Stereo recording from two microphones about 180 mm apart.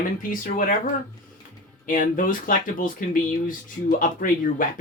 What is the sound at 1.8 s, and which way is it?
Speech, 50° left (ahead or behind).